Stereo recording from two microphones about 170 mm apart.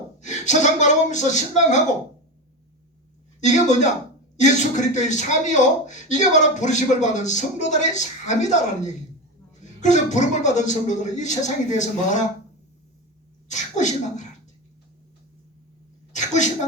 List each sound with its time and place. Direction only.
0.2 s a man's voice: 45° left (ahead or behind)
3.4 s a man's voice: 45° left (ahead or behind)
13.5 s a man's voice: 45° left (ahead or behind)
16.1 s a sound: 45° left (ahead or behind)